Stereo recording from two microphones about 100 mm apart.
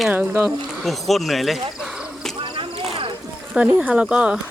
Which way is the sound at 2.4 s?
60° right (ahead or behind).